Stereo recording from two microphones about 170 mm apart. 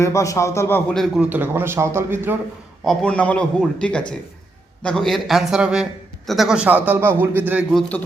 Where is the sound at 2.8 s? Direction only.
5° left (ahead or behind); by 7.6 s 10° right (ahead or behind).